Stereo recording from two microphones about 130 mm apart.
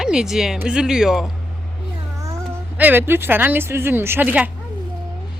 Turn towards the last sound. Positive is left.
turn(degrees=-10)  # may be behind; listen again after turning